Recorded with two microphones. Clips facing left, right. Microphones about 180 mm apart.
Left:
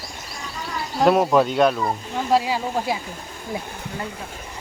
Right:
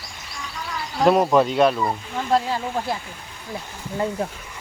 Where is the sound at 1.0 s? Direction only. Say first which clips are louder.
Even; centre (ahead or behind).